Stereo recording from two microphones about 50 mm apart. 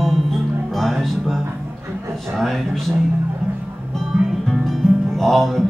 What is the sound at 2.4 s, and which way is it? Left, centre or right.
Music, centre.